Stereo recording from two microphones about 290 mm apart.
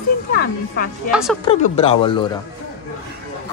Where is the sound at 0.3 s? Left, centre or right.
Left.